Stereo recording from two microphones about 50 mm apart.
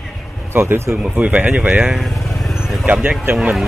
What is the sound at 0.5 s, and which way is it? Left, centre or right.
Speech, right.